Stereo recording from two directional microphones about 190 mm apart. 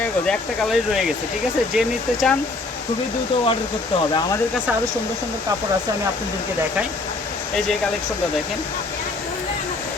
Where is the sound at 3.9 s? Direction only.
25° left (ahead or behind).